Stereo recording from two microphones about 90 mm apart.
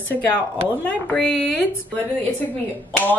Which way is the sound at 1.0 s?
15° left (ahead or behind).